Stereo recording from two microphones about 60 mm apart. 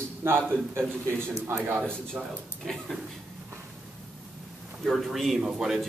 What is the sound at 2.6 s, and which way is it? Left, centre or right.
Speech, centre.